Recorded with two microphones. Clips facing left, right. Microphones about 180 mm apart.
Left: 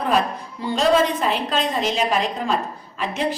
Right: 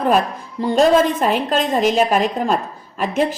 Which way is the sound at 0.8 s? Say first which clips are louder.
Right 4 dB; 45° right (ahead or behind).